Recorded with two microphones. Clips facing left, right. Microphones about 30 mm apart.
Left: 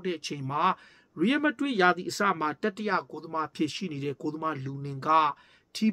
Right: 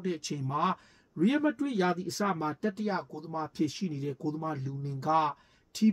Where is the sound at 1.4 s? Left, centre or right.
Left.